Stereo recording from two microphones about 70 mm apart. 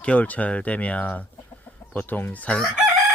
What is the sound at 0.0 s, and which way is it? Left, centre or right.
Speech, left.